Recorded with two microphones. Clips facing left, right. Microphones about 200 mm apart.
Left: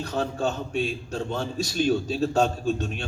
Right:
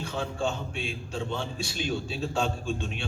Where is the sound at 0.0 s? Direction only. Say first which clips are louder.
Left 4 dB; 40° left (ahead or behind).